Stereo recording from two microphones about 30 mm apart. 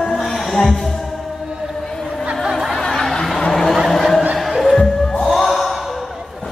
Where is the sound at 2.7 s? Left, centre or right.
Centre.